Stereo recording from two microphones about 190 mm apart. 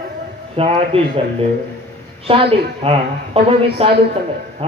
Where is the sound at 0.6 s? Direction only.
30° right (ahead or behind).